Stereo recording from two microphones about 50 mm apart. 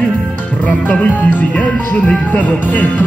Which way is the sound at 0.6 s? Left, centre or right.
Left.